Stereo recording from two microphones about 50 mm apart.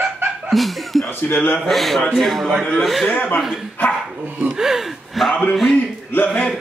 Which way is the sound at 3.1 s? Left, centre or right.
Left.